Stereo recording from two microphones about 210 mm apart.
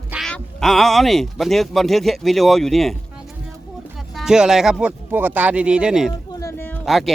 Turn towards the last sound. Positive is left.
turn(degrees=0)  # may be behind; listen again after turning